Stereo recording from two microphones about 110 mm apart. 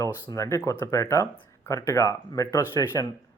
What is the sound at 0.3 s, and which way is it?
Speech, 25° left (ahead or behind).